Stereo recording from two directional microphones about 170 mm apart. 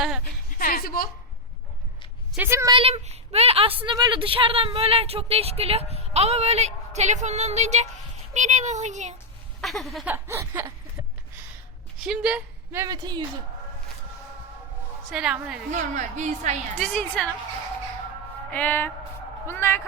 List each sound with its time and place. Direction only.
0.6 s a woman's voice: 60° left (ahead or behind)
2.3 s a woman's voice: 15° right (ahead or behind)
2.7 s a woman's voice: 35° right (ahead or behind)
9.6 s speech: centre (ahead or behind)
10.2 s a woman's voice: 15° right (ahead or behind)
12.0 s speech: 5° right (ahead or behind)
12.8 s speech: 25° right (ahead or behind)
15.1 s speech: 5° right (ahead or behind)
15.7 s speech: 45° right (ahead or behind)
16.8 s speech: 5° left (ahead or behind)
18.5 s speech: 10° left (ahead or behind)